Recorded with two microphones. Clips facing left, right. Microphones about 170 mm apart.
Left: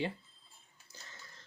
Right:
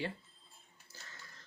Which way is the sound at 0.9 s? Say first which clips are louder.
Left 1 dB; 15° left (ahead or behind).